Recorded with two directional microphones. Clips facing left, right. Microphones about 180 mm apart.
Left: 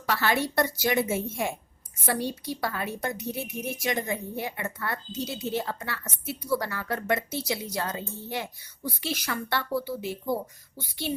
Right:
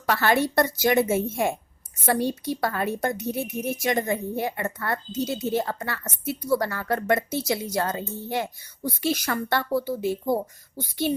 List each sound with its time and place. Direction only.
0.0 s a woman's voice: 50° right (ahead or behind)